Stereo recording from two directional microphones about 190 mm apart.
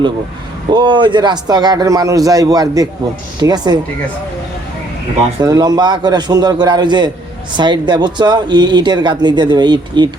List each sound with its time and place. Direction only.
0.7 s speech: 25° right (ahead or behind)
5.4 s speech: 20° right (ahead or behind)